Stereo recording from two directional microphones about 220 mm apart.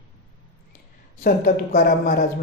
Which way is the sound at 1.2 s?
40° left (ahead or behind).